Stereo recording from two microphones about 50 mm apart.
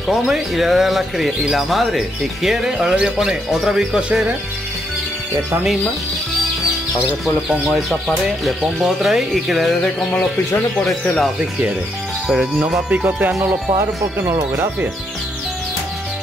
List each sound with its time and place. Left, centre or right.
0.3 s speech: centre
7.6 s speech: centre
8.6 s speech: centre
12.3 s speech: centre
12.9 s music: right
13.7 s speech: right